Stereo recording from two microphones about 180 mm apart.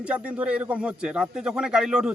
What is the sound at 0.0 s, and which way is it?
A man's voice, 5° right (ahead or behind).